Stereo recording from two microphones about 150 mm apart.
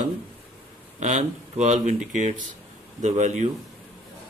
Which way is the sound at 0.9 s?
50° right (ahead or behind).